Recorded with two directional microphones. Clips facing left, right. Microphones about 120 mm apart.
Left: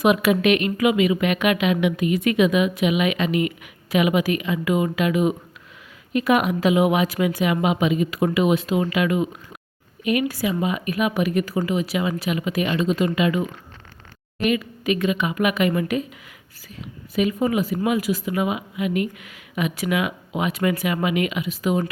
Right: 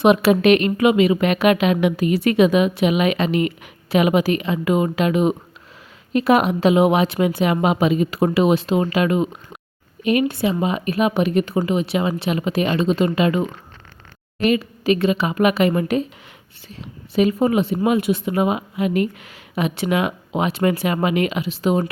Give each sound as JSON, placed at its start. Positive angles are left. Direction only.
{"t": 0.0, "sound": "a woman's voice", "side_deg": -30}